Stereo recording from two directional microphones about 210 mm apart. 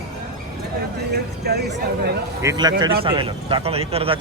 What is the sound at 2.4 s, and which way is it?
Speech, 20° right (ahead or behind).